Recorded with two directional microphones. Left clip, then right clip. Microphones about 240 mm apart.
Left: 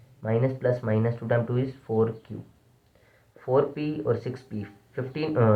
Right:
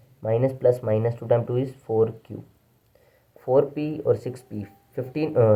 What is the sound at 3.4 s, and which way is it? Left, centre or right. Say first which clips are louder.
Speech: right 3 dB; centre.